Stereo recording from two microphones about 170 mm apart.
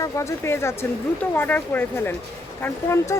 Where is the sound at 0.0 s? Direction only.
15° left (ahead or behind).